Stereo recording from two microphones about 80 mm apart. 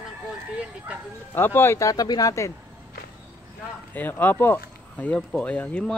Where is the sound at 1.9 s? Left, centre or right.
Left.